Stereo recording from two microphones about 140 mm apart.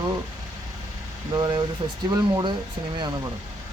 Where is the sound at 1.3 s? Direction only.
35° right (ahead or behind).